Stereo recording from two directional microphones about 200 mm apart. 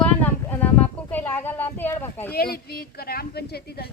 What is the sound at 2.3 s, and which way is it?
A woman's voice, 50° left (ahead or behind).